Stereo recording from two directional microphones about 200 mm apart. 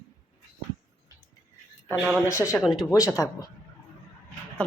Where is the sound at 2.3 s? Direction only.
15° left (ahead or behind).